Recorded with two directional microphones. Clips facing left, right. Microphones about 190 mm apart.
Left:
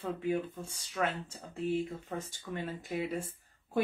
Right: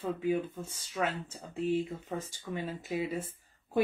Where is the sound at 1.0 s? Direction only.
10° right (ahead or behind).